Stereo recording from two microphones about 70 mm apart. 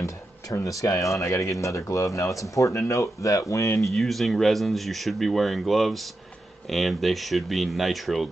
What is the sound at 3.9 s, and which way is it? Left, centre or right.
Speech, centre.